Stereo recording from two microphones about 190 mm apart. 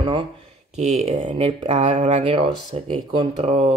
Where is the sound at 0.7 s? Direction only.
35° right (ahead or behind).